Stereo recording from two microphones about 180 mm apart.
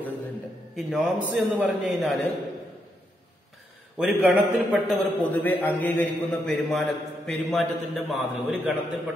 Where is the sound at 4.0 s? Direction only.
5° right (ahead or behind).